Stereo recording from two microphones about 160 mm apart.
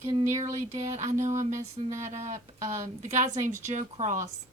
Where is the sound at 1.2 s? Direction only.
50° right (ahead or behind).